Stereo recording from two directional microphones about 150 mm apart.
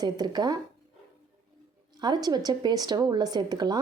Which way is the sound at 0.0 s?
25° right (ahead or behind).